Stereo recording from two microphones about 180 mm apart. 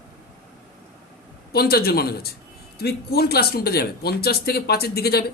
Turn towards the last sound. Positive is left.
turn(degrees=60)  # may be behind; listen again after turning